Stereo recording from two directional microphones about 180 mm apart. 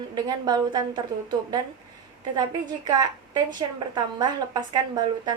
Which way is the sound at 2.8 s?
20° right (ahead or behind).